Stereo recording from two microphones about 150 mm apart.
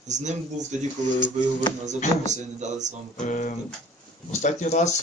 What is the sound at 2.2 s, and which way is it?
Speech, 50° right (ahead or behind).